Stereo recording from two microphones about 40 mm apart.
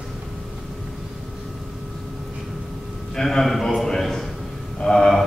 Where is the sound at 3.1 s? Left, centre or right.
Centre.